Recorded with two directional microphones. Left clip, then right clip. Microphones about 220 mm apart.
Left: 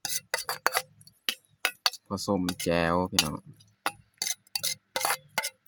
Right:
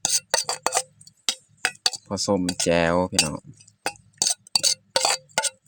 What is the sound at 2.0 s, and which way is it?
Speech, 25° right (ahead or behind).